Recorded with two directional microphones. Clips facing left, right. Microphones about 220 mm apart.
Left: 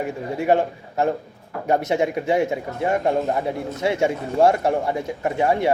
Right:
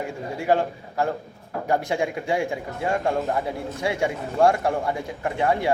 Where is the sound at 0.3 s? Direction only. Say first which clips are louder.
Left 3 dB; 20° left (ahead or behind).